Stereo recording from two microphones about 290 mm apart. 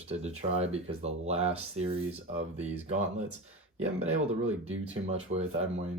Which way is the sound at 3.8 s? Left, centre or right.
Right.